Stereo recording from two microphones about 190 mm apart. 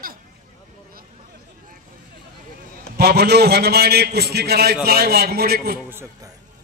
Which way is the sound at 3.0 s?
55° right (ahead or behind).